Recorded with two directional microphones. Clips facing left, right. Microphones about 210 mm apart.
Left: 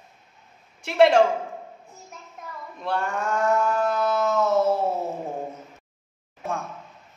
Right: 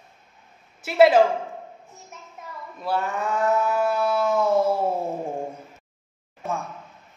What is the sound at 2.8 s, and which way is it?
Livestock, 5° right (ahead or behind).